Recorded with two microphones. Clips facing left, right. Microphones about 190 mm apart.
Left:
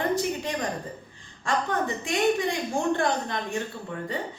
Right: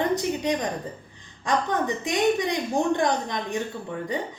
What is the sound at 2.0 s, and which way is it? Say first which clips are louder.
A woman's voice: right 1 dB; 20° right (ahead or behind).